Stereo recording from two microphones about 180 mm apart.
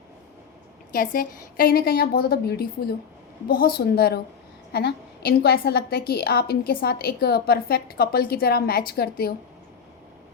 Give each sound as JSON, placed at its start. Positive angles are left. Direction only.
{"t": 0.9, "sound": "a woman's voice", "side_deg": 50}